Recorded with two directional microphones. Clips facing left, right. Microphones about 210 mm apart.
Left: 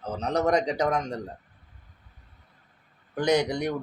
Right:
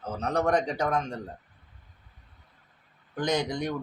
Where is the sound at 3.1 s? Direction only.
10° left (ahead or behind).